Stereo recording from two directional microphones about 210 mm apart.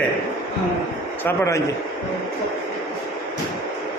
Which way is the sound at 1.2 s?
10° left (ahead or behind).